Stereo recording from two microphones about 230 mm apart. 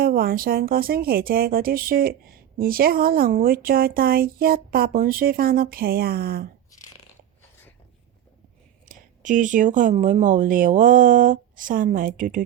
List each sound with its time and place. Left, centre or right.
0.0 s speech: right
6.7 s biting: centre
8.9 s speech: right